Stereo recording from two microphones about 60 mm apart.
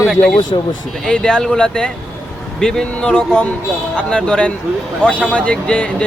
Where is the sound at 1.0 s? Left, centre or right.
Centre.